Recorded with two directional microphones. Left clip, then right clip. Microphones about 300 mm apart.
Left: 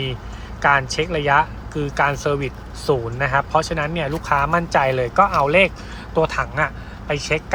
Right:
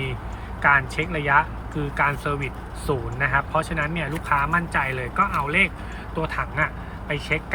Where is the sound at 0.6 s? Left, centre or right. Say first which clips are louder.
Left 2 dB; centre.